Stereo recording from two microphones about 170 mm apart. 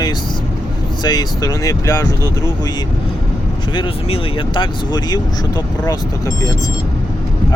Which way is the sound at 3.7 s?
30° left (ahead or behind).